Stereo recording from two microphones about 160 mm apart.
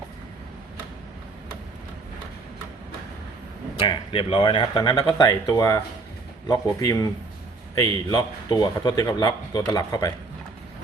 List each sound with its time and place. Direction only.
3.8 s speech: 35° left (ahead or behind)